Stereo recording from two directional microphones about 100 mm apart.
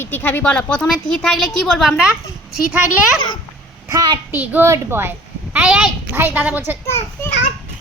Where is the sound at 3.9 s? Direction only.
40° right (ahead or behind).